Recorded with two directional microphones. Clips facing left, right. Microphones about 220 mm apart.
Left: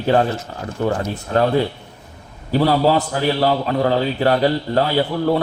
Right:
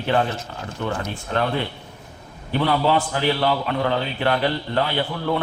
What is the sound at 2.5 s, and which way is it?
Speech, 35° left (ahead or behind).